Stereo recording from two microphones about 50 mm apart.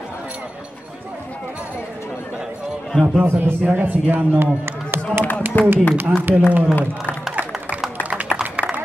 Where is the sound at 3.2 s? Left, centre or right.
Right.